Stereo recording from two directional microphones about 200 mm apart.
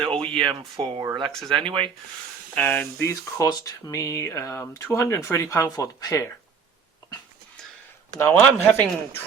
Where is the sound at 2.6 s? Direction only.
10° left (ahead or behind).